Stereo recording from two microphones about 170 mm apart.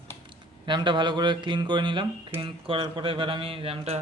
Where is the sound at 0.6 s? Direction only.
25° right (ahead or behind).